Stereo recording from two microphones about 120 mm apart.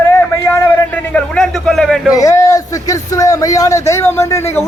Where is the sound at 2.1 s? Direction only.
30° left (ahead or behind).